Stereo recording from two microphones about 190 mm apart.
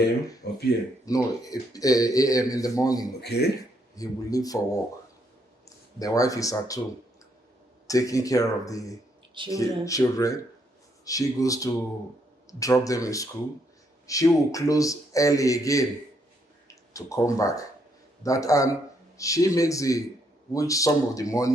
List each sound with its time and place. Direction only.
0.4 s speech: 60° left (ahead or behind)
1.0 s speech: 20° left (ahead or behind)
3.2 s speech: 60° left (ahead or behind)
3.9 s speech: 20° left (ahead or behind)
5.6 s speech: 20° left (ahead or behind)
7.9 s a man's voice: 15° left (ahead or behind)